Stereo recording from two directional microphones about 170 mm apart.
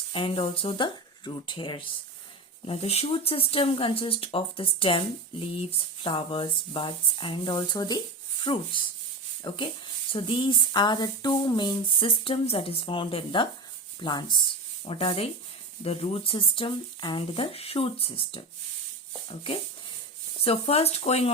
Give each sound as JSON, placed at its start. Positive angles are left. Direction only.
{"t": 0.1, "sound": "a woman's voice", "side_deg": 30}
{"t": 20.4, "sound": "speech", "side_deg": 35}